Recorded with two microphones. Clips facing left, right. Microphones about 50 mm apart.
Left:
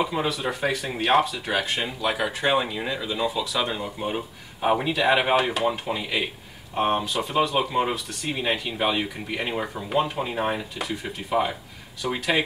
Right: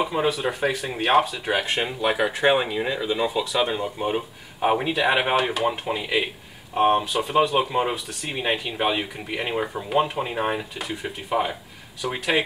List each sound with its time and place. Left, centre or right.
0.0 s speech: centre
1.5 s speech: right; by 12.4 s centre